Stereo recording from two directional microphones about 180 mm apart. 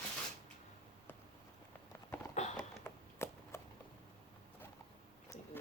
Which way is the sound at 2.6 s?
15° left (ahead or behind).